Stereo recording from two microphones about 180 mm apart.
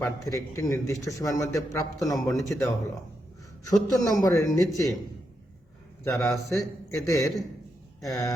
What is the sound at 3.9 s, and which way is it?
Speech, 15° left (ahead or behind).